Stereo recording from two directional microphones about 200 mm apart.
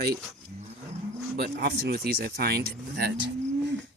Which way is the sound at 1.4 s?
50° right (ahead or behind).